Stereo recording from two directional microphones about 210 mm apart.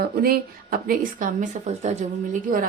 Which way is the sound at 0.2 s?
45° right (ahead or behind).